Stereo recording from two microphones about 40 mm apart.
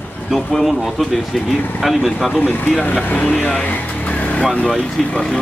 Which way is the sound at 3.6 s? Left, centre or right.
Left.